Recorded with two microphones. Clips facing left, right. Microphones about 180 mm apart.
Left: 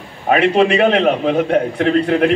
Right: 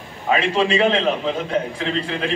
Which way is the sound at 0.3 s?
65° left (ahead or behind).